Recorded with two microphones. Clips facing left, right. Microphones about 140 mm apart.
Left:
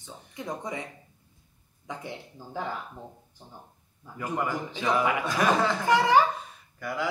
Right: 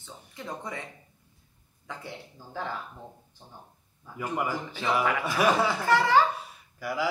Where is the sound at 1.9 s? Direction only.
15° left (ahead or behind).